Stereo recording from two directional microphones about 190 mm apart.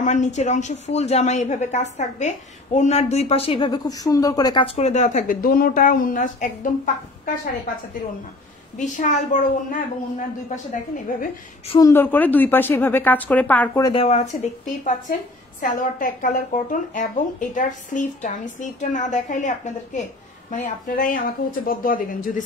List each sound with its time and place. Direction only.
0.0 s a woman's voice: 40° left (ahead or behind)
8.7 s a woman's voice: 40° left (ahead or behind)
11.8 s speech: 10° left (ahead or behind)
13.8 s a woman's voice: 30° left (ahead or behind)